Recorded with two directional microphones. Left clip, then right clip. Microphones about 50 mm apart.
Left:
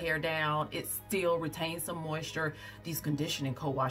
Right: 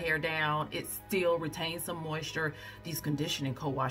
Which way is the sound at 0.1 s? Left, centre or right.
Centre.